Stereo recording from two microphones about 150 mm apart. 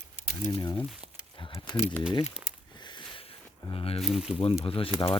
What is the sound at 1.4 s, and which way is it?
Speech, 30° left (ahead or behind).